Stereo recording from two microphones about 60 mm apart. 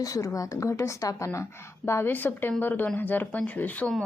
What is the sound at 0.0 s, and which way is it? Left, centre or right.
A woman's voice, left.